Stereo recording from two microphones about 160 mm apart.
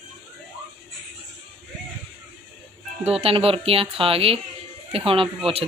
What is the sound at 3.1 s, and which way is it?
A woman's voice, 40° right (ahead or behind).